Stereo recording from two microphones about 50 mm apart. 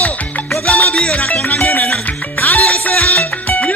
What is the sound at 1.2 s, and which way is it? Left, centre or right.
Music, left.